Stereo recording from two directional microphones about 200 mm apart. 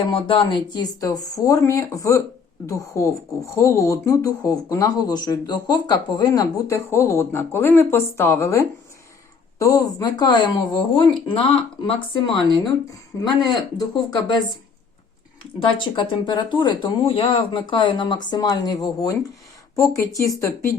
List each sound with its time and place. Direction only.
0.1 s speech: 25° left (ahead or behind)
15.8 s speech: 25° left (ahead or behind)